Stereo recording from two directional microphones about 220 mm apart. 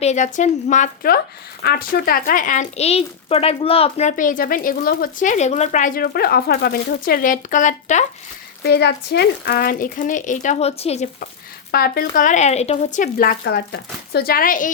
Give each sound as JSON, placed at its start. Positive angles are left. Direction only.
{"t": 0.0, "sound": "speech", "side_deg": 30}
{"t": 8.6, "sound": "speech", "side_deg": 50}
{"t": 11.7, "sound": "speech", "side_deg": 40}